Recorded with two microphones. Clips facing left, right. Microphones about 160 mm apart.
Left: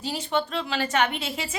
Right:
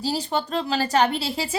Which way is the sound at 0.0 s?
35° right (ahead or behind).